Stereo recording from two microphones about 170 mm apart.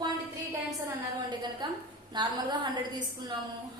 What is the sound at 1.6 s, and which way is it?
A woman's voice, 25° right (ahead or behind).